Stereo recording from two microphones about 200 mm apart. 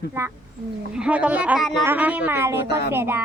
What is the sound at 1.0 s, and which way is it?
A woman's voice, 5° right (ahead or behind).